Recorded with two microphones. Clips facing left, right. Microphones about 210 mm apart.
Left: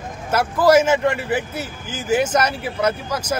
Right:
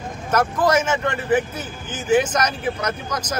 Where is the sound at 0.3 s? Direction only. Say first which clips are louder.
Left 4 dB; 10° left (ahead or behind).